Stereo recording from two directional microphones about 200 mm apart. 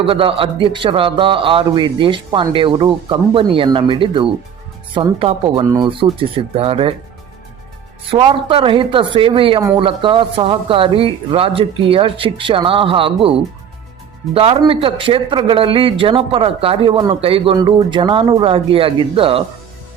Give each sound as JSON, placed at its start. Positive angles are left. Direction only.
{"t": 0.0, "sound": "a man's voice", "side_deg": -25}
{"t": 8.1, "sound": "a man's voice", "side_deg": -25}